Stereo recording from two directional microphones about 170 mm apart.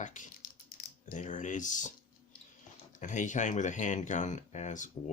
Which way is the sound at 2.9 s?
45° left (ahead or behind).